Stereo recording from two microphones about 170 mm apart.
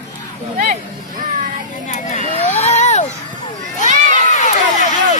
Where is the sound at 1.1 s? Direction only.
50° right (ahead or behind).